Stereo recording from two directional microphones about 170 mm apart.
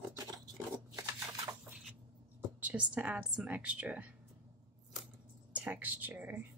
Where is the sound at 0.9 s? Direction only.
20° right (ahead or behind).